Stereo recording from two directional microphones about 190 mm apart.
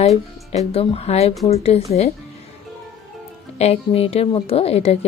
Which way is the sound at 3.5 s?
30° left (ahead or behind).